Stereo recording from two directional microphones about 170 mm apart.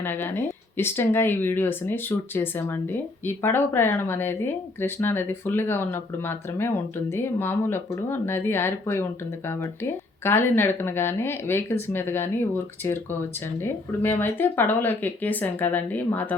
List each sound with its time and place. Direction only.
0.0 s speech: 10° left (ahead or behind)
10.2 s speech: 10° left (ahead or behind)